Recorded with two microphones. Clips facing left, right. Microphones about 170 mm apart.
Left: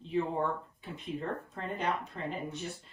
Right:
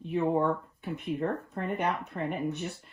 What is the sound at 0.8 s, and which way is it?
Speech, 60° right (ahead or behind).